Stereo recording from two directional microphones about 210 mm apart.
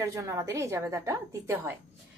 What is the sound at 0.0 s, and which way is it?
A woman's voice, 15° right (ahead or behind).